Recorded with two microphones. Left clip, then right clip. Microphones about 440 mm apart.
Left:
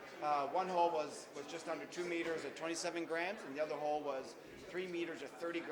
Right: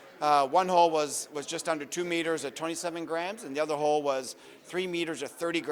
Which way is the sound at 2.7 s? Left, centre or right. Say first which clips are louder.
Right 5 dB; right.